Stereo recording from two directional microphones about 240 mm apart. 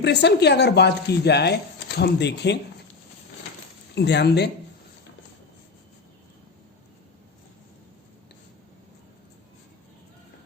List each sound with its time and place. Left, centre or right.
0.0 s speech: left
3.9 s speech: left